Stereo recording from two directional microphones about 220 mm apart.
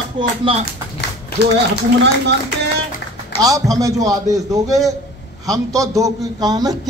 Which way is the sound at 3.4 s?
15° right (ahead or behind).